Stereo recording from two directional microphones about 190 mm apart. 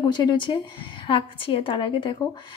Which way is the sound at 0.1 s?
25° left (ahead or behind).